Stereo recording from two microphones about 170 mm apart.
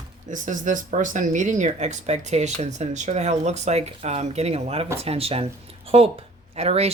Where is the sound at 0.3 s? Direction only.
50° right (ahead or behind).